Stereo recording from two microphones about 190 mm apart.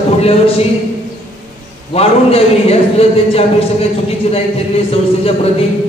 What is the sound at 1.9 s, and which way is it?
A man's voice, 30° left (ahead or behind).